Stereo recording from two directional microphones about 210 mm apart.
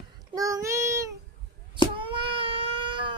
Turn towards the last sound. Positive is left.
turn(degrees=-25)  # may be behind; listen again after turning